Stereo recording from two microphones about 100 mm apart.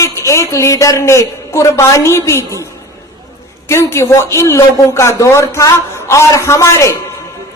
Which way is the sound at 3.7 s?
30° left (ahead or behind).